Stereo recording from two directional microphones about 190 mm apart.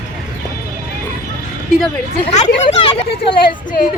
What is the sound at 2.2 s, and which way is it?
Speech, 35° left (ahead or behind).